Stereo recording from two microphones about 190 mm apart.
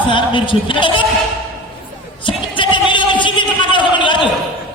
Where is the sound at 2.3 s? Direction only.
25° left (ahead or behind).